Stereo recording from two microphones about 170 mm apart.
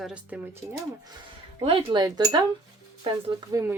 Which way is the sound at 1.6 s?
35° right (ahead or behind).